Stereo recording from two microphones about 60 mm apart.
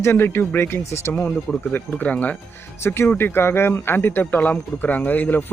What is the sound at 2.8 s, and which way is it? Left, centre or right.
Speech, left.